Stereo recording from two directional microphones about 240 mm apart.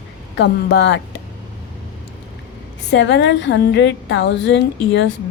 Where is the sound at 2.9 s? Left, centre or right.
Left.